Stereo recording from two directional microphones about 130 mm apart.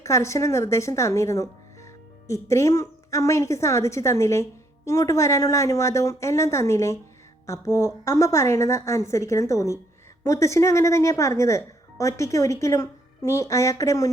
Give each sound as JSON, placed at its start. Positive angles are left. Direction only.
{"t": 0.0, "sound": "a woman's voice", "side_deg": 20}